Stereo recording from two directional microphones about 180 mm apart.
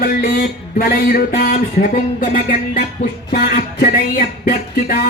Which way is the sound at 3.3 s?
60° left (ahead or behind).